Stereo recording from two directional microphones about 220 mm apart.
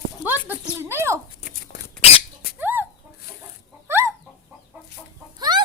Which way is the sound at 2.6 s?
10° right (ahead or behind).